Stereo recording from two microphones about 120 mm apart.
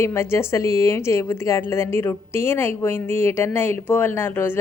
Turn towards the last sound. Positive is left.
turn(degrees=20)  # may be behind; listen again after turning